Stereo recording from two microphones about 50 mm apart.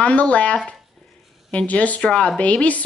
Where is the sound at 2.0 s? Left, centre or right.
Centre.